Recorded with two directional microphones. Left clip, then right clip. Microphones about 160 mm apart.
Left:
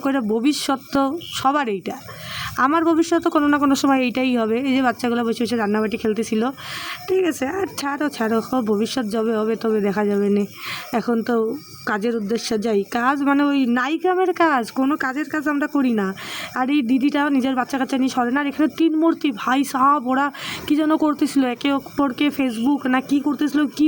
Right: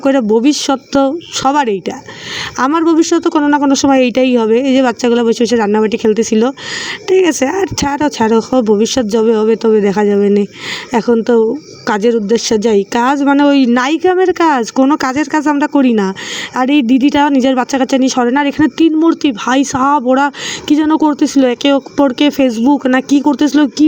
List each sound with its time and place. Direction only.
0.0 s a woman's voice: 25° right (ahead or behind)
14.8 s a woman's voice: 40° right (ahead or behind)